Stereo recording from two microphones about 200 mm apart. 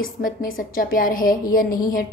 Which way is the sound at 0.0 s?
45° left (ahead or behind).